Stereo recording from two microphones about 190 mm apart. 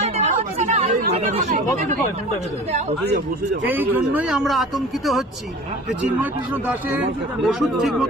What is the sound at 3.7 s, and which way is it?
Speech, 10° right (ahead or behind).